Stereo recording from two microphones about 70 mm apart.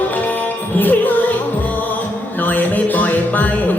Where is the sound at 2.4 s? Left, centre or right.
Left.